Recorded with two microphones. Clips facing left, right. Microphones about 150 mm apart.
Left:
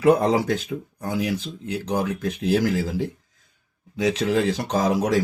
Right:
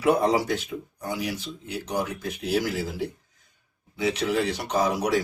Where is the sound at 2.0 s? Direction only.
90° left.